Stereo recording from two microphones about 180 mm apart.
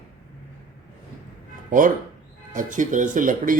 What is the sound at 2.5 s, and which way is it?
A man's voice, 45° right (ahead or behind).